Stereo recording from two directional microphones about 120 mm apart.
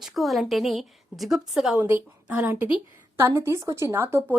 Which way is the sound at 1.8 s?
25° right (ahead or behind).